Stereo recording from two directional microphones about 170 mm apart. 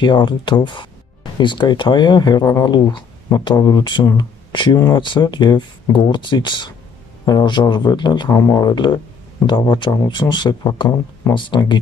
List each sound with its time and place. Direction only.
0.0 s speech: 25° left (ahead or behind)